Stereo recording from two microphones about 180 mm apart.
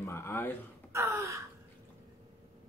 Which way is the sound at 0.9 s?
15° right (ahead or behind).